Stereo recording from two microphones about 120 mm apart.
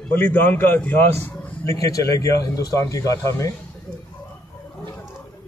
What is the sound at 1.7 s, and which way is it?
Speech, 30° left (ahead or behind).